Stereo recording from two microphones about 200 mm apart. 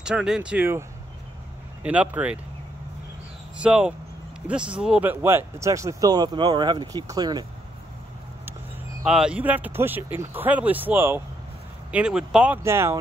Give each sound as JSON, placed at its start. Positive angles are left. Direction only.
{"t": 0.0, "sound": "speech", "side_deg": -5}
{"t": 3.5, "sound": "speech", "side_deg": -5}
{"t": 9.0, "sound": "speech", "side_deg": -5}